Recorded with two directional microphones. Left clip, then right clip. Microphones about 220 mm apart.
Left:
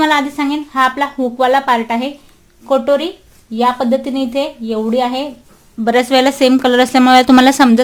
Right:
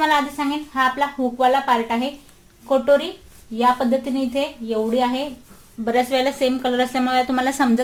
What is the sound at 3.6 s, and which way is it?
A woman's voice, 40° left (ahead or behind).